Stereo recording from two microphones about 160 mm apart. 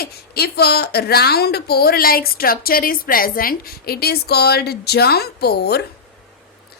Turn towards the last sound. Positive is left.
turn(degrees=90)